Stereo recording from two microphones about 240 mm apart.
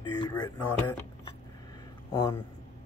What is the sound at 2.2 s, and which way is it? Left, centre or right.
Speech, centre.